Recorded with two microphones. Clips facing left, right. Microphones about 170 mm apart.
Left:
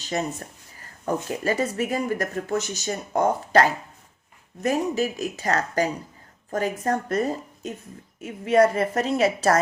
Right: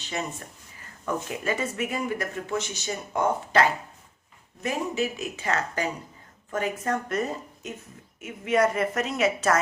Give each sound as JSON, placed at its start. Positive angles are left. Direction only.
{"t": 0.0, "sound": "speech", "side_deg": 40}